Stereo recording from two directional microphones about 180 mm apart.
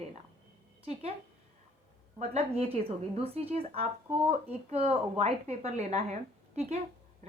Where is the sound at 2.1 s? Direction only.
35° right (ahead or behind).